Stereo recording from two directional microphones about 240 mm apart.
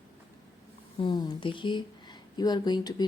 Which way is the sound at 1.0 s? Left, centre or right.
Centre.